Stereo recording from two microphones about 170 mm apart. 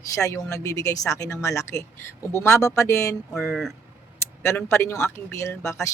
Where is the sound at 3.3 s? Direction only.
Centre (ahead or behind).